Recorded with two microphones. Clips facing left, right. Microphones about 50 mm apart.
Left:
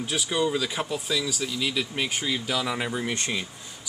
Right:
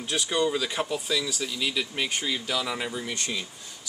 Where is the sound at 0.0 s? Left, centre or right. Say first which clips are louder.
Even; centre.